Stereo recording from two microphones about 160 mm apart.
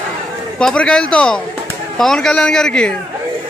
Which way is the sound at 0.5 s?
5° left (ahead or behind).